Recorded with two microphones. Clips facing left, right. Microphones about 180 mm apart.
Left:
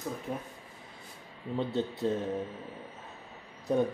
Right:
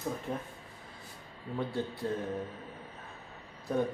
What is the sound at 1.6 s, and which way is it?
Speech, 20° left (ahead or behind).